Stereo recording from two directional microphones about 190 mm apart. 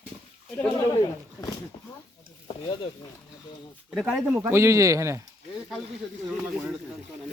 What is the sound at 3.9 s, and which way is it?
Speech, centre (ahead or behind).